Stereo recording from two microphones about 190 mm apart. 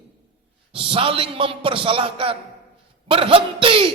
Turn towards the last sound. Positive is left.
turn(degrees=-30)  # may be behind; listen again after turning